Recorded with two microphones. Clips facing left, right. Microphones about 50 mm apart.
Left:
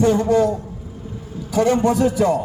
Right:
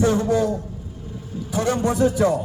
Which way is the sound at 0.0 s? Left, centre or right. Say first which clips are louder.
Left 3 dB; left.